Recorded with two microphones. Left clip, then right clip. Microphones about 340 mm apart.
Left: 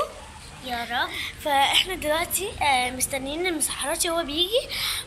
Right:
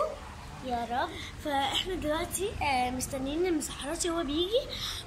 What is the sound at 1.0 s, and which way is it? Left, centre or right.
A woman's voice, centre.